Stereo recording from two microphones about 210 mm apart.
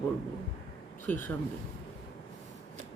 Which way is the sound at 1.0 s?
10° left (ahead or behind).